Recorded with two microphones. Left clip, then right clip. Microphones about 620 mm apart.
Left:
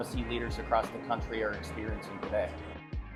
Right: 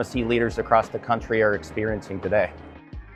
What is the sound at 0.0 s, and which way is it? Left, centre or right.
Speech, right.